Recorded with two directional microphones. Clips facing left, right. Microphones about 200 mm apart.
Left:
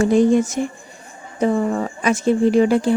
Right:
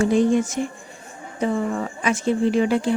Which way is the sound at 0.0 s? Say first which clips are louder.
Left 3 dB; 40° left (ahead or behind).